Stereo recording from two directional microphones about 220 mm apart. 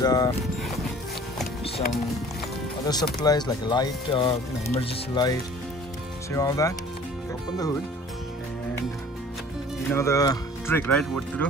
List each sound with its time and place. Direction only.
0.0 s speech: 15° left (ahead or behind)
2.9 s speech: 20° left (ahead or behind)
9.8 s speech: 10° left (ahead or behind)